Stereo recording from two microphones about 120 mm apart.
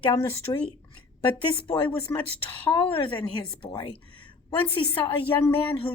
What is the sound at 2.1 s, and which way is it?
Speech, 25° left (ahead or behind).